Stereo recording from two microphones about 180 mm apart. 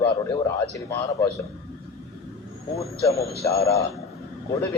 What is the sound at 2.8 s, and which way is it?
A man's voice, 15° left (ahead or behind).